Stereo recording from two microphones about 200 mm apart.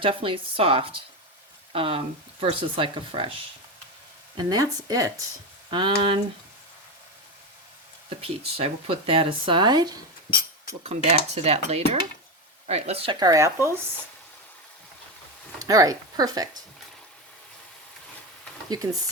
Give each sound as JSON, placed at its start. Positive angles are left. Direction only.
{"t": 0.0, "sound": "speech", "side_deg": -25}
{"t": 8.2, "sound": "speech", "side_deg": -30}
{"t": 10.8, "sound": "cutlery", "side_deg": -30}
{"t": 12.6, "sound": "speech", "side_deg": -30}
{"t": 15.5, "sound": "speech", "side_deg": -15}
{"t": 18.7, "sound": "speech", "side_deg": -20}